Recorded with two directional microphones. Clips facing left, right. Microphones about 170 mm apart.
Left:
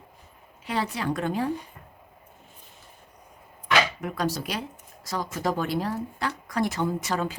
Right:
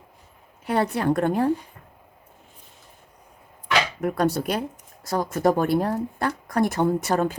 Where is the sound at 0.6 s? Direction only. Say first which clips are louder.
Right 6 dB; 55° right (ahead or behind).